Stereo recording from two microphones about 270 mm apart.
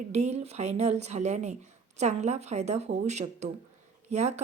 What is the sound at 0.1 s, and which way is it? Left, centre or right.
Speech, right.